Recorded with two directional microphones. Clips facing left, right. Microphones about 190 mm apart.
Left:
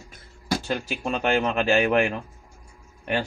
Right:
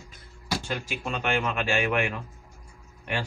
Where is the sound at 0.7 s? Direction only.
35° left (ahead or behind).